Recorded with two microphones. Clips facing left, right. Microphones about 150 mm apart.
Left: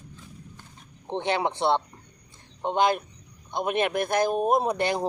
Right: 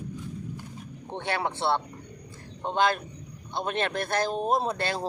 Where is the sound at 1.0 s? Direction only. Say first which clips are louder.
Left 4 dB; 20° left (ahead or behind).